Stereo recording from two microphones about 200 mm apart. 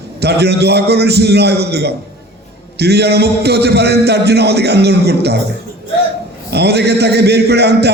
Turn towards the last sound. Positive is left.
turn(degrees=-55)  # may be behind; listen again after turning